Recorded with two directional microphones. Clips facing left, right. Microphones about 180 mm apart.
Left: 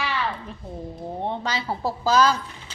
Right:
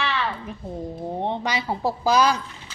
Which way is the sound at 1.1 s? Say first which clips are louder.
Right 1 dB; 15° right (ahead or behind).